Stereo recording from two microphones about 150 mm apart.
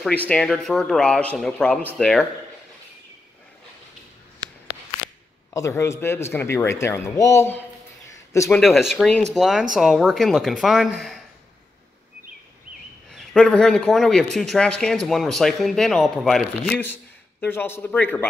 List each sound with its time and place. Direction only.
0.0 s speech: 10° left (ahead or behind)
5.5 s speech: 20° left (ahead or behind)
8.5 s speech: centre (ahead or behind)
13.1 s speech: 5° left (ahead or behind)